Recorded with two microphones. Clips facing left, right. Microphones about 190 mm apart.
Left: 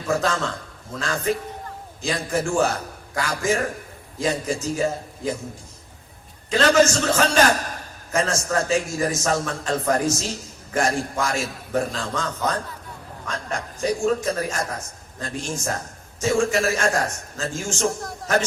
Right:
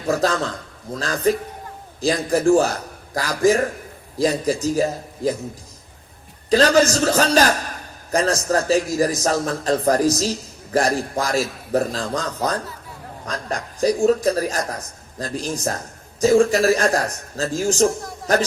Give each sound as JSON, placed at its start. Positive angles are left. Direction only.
{"t": 0.1, "sound": "a man's voice", "side_deg": -35}
{"t": 6.5, "sound": "a man's voice", "side_deg": -35}